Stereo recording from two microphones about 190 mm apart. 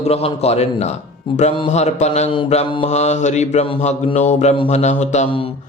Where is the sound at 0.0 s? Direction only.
30° left (ahead or behind).